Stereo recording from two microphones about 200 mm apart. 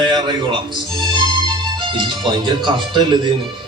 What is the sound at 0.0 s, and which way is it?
Music, 20° right (ahead or behind).